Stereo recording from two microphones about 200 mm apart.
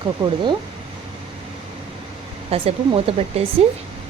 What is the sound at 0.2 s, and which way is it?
Speech, 20° right (ahead or behind).